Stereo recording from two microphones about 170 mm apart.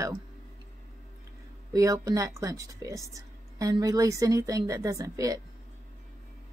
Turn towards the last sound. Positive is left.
turn(degrees=-20)  # may be behind; listen again after turning